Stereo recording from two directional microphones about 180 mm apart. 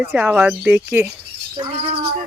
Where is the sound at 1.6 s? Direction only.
30° right (ahead or behind).